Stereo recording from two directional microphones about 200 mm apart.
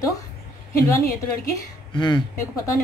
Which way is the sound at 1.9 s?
25° left (ahead or behind).